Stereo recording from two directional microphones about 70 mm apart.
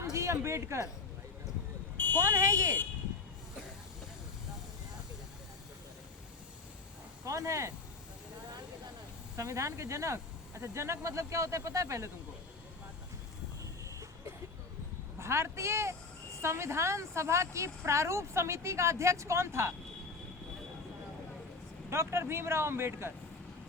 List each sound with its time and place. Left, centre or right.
0.0 s a woman's voice: right
2.1 s speech: right
7.3 s a woman's voice: right
9.3 s a woman's voice: right
15.2 s a woman's voice: right
21.8 s speech: right